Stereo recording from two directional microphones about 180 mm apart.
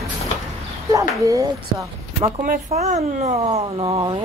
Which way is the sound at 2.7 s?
40° right (ahead or behind).